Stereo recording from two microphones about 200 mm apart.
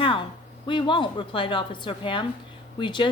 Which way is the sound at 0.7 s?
25° left (ahead or behind).